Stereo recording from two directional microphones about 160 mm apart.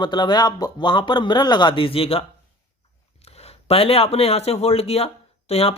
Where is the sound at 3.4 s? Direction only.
40° left (ahead or behind).